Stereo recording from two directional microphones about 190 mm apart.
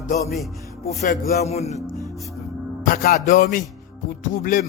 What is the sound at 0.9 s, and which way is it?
Speech, 35° left (ahead or behind).